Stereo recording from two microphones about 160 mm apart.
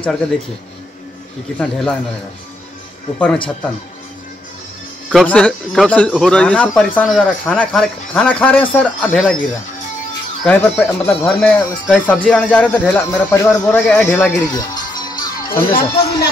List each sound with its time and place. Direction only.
0.0 s speech: 5° left (ahead or behind)
1.6 s speech: 5° left (ahead or behind)
5.1 s speech: 5° left (ahead or behind)
10.4 s speech: 10° left (ahead or behind)
14.5 s music: 25° left (ahead or behind)
15.5 s speech: 70° left (ahead or behind)